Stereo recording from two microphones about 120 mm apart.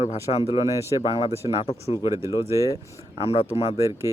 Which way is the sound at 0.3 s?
60° left (ahead or behind).